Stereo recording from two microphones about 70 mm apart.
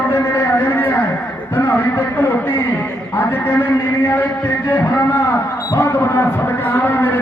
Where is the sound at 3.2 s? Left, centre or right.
Left.